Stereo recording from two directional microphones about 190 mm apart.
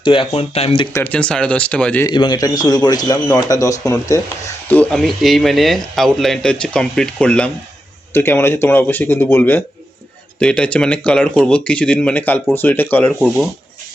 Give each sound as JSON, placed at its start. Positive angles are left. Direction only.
{"t": 0.0, "sound": "speech", "side_deg": 25}
{"t": 0.9, "sound": "speech", "side_deg": 10}
{"t": 2.0, "sound": "speech", "side_deg": 20}
{"t": 4.7, "sound": "speech", "side_deg": 5}